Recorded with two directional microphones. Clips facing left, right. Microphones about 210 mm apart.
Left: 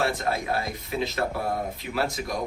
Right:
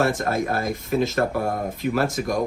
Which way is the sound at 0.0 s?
50° right (ahead or behind).